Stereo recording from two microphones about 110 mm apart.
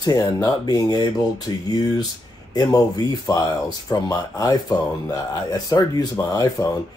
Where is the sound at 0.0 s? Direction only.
35° left (ahead or behind).